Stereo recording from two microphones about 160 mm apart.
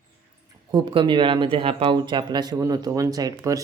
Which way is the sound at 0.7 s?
30° right (ahead or behind).